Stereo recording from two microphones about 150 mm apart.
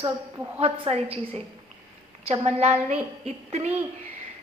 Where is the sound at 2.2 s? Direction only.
45° right (ahead or behind).